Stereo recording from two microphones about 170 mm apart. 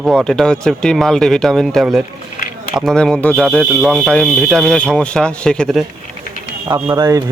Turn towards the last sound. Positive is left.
turn(degrees=-25)  # may be behind; listen again after turning